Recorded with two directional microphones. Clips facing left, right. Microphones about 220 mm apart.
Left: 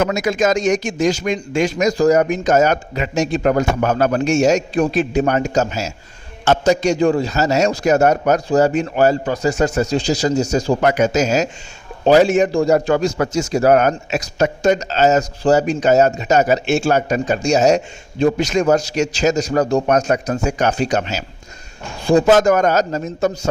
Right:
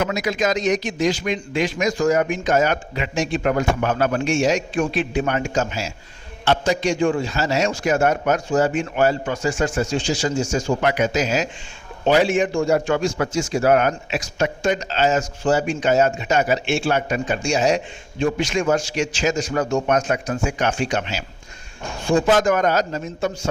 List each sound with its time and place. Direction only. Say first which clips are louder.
0.0 s a man's voice: left 5 dB; 45° left (ahead or behind)